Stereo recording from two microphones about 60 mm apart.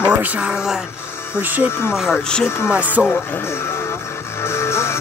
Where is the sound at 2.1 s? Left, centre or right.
Centre.